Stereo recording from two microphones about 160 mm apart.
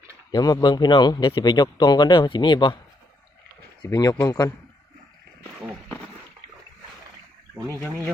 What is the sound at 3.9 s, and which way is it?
Speech, 20° left (ahead or behind).